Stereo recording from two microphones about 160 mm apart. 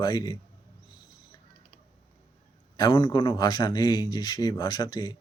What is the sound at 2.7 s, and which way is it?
A man's voice, 25° left (ahead or behind).